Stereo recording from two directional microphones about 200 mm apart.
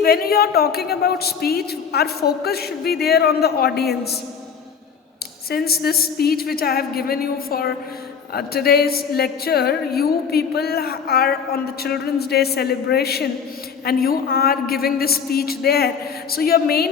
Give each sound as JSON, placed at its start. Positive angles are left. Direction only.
{"t": 0.0, "sound": "a woman's voice", "side_deg": 50}
{"t": 5.5, "sound": "a woman's voice", "side_deg": 50}